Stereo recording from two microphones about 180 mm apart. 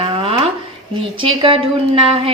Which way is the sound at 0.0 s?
30° right (ahead or behind).